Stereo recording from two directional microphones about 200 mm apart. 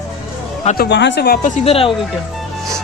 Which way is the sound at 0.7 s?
60° left (ahead or behind).